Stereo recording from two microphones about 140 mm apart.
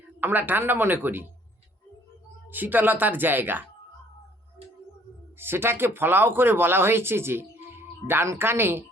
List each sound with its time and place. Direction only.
0.2 s speech: 15° right (ahead or behind)
2.5 s speech: 15° right (ahead or behind)
5.4 s speech: 15° right (ahead or behind)